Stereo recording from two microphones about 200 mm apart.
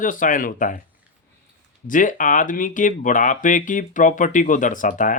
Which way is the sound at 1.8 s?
40° left (ahead or behind).